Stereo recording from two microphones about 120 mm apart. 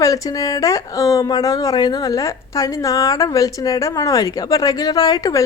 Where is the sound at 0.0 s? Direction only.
30° left (ahead or behind).